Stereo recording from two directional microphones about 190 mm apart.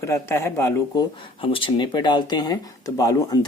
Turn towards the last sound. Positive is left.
turn(degrees=20)  # may be behind; listen again after turning